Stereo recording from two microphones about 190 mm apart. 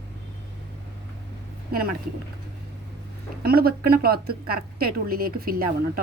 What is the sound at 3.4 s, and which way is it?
A woman's voice, 55° right (ahead or behind).